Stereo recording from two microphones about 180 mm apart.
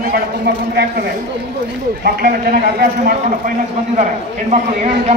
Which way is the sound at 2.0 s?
55° right (ahead or behind).